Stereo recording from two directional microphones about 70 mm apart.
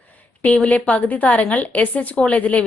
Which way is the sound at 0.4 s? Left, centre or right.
Centre.